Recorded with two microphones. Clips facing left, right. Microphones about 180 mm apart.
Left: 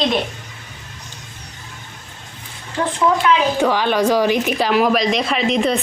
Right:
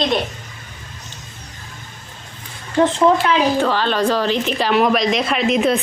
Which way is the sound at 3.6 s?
15° left (ahead or behind).